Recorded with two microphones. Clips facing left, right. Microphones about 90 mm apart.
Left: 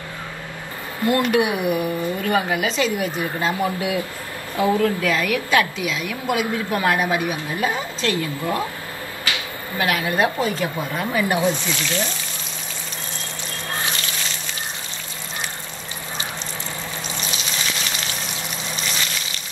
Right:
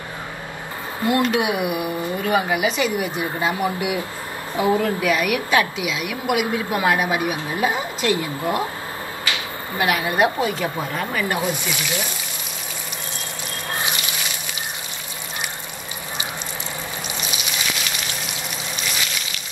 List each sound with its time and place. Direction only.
1.3 s a woman's voice: 15° right (ahead or behind)
9.8 s a woman's voice: 20° right (ahead or behind)
11.0 s speech: 15° left (ahead or behind)
11.5 s a woman's voice: 15° right (ahead or behind)
13.8 s a sound: 15° right (ahead or behind)